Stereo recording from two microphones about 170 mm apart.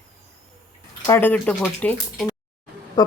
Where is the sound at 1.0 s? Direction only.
15° left (ahead or behind).